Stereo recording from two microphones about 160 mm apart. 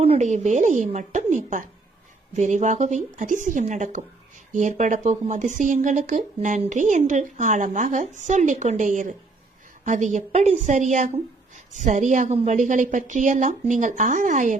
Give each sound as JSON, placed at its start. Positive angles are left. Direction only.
{"t": 0.0, "sound": "a woman's voice", "side_deg": -40}